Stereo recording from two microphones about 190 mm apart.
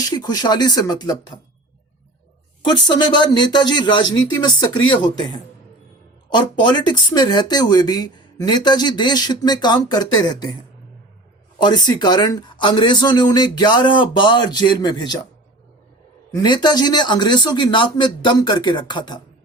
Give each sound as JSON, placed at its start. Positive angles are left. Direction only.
{"t": 0.0, "sound": "speech", "side_deg": 20}
{"t": 2.6, "sound": "speech", "side_deg": 20}
{"t": 11.6, "sound": "speech", "side_deg": 20}
{"t": 16.3, "sound": "speech", "side_deg": 20}